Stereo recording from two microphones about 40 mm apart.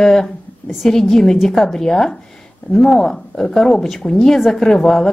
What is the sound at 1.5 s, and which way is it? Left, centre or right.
A woman's voice, centre.